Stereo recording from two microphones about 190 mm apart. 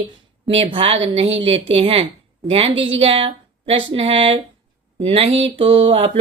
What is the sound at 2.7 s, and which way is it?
Speech, 75° right (ahead or behind).